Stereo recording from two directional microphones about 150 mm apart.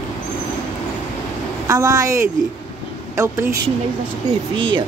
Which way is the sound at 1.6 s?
20° right (ahead or behind).